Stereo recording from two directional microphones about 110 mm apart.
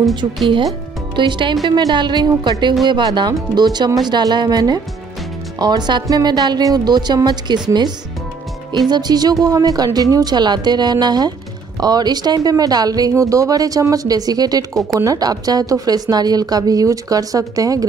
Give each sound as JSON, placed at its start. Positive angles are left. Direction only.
{"t": 1.1, "sound": "speech", "side_deg": -45}